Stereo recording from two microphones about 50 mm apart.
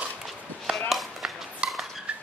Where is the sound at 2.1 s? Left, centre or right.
Right.